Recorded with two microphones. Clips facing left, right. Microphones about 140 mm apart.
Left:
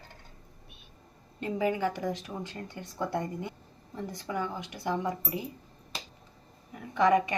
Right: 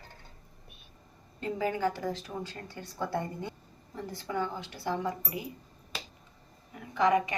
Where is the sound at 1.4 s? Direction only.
20° left (ahead or behind).